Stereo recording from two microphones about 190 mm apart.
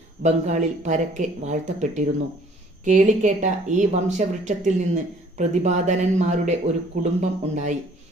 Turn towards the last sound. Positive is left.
turn(degrees=-40)  # may be behind; listen again after turning